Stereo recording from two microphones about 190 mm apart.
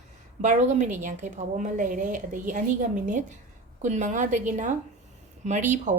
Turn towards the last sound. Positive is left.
turn(degrees=-40)  # may be behind; listen again after turning